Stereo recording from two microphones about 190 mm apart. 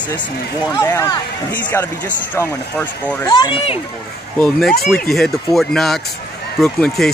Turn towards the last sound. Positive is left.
turn(degrees=0)  # may be behind; listen again after turning